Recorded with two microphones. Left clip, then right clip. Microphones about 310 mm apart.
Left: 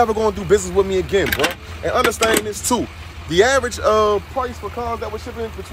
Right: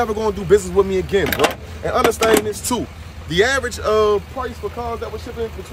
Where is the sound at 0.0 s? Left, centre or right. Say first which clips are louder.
Left 3 dB; centre.